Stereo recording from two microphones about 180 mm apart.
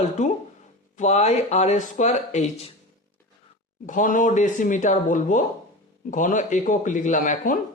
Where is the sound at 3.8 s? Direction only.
45° left (ahead or behind).